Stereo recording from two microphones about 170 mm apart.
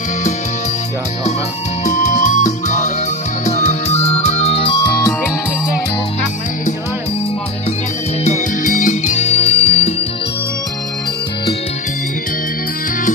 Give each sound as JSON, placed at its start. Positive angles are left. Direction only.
{"t": 1.8, "sound": "music", "side_deg": 45}
{"t": 8.2, "sound": "music", "side_deg": 45}